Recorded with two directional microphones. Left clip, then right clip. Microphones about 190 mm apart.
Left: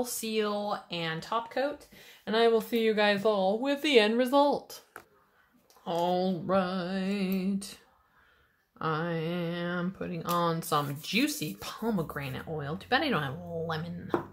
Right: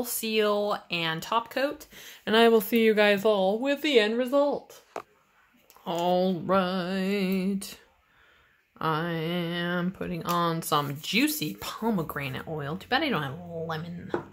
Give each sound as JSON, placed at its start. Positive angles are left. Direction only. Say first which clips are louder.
{"t": 0.0, "sound": "speech", "louder": "right 5 dB", "side_deg": -25}
{"t": 3.6, "sound": "a woman's voice", "louder": "right 1 dB", "side_deg": -10}
{"t": 5.9, "sound": "speech", "louder": "right 3 dB", "side_deg": -30}